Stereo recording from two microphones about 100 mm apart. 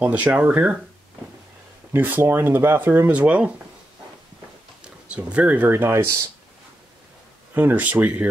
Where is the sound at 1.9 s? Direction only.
20° right (ahead or behind).